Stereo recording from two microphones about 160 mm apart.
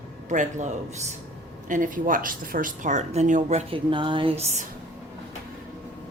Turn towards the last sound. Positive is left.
turn(degrees=-40)  # may be behind; listen again after turning